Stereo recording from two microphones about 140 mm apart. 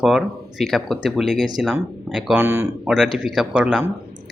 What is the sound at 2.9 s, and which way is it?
Speech, 5° right (ahead or behind).